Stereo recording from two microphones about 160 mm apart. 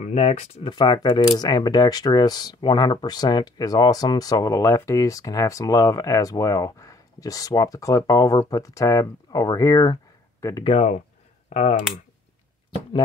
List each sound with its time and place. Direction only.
0.0 s speech: 45° left (ahead or behind)
0.7 s speech: 25° left (ahead or behind)
10.6 s speech: 40° left (ahead or behind)